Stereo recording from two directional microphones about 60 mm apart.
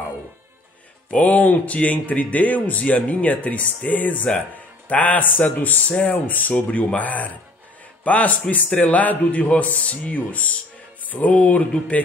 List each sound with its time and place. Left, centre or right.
1.1 s speech: left